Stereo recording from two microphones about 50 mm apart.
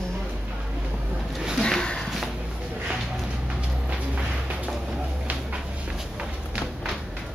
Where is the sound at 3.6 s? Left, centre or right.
Right.